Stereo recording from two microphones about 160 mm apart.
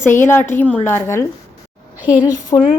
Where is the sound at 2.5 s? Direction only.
30° left (ahead or behind).